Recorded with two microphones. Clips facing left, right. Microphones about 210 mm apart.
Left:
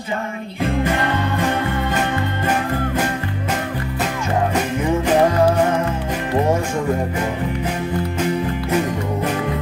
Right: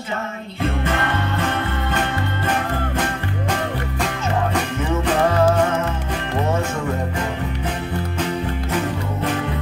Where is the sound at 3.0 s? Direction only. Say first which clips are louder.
Left 2 dB; 10° left (ahead or behind).